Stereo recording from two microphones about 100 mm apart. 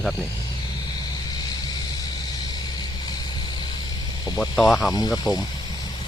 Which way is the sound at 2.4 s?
45° left (ahead or behind).